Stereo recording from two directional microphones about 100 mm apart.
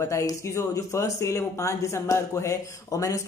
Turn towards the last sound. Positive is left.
turn(degrees=35)  # may be behind; listen again after turning